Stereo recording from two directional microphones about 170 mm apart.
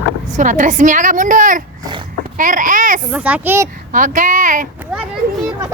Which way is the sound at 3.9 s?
50° right (ahead or behind).